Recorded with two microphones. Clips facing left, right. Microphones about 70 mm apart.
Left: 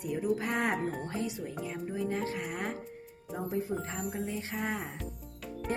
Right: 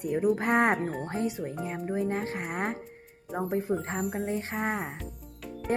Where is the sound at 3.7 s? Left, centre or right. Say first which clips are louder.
Right 5 dB; right.